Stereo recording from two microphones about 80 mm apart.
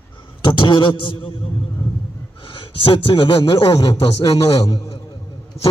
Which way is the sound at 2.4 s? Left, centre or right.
Left.